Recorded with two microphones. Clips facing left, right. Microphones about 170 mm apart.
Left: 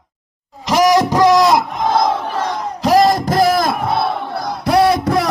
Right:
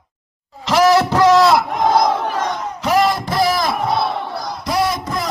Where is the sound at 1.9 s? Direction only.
25° left (ahead or behind); by 5.3 s 65° left (ahead or behind).